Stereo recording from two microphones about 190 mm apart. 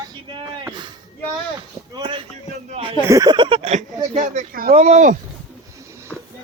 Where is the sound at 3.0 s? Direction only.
20° right (ahead or behind); by 5.1 s 40° right (ahead or behind).